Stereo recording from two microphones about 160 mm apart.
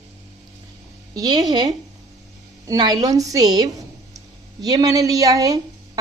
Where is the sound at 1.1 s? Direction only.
25° right (ahead or behind).